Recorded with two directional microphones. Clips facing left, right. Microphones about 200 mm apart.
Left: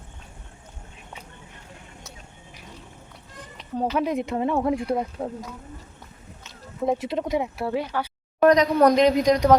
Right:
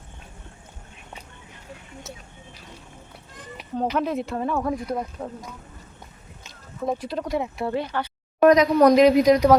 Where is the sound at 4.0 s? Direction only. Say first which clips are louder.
Left 1 dB; 15° left (ahead or behind); by 5.3 s 35° left (ahead or behind).